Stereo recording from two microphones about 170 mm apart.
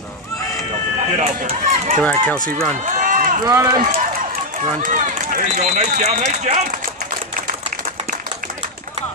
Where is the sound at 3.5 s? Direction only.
20° right (ahead or behind).